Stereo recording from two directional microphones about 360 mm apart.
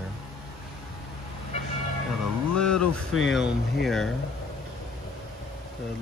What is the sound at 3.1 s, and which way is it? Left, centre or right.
Speech, left.